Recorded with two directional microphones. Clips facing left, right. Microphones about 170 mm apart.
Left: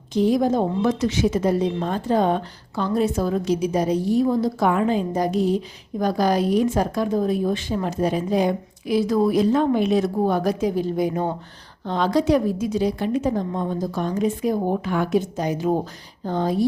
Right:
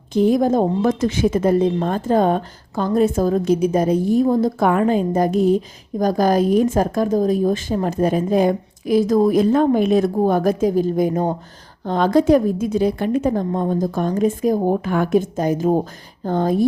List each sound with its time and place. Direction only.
0.1 s a woman's voice: 50° right (ahead or behind)